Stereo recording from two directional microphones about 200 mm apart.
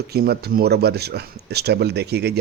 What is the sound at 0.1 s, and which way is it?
A man's voice, 50° right (ahead or behind).